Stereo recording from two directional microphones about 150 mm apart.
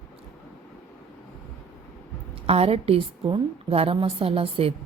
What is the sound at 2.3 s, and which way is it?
A woman's voice, 40° right (ahead or behind).